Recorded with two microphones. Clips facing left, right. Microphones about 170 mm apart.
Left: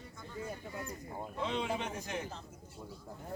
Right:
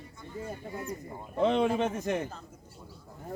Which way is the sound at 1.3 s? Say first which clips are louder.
Right 11 dB; 55° right (ahead or behind).